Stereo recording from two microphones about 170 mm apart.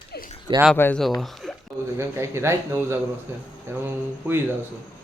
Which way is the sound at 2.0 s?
15° right (ahead or behind).